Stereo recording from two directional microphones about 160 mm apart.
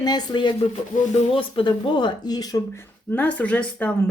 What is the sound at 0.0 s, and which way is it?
Speech, 25° left (ahead or behind).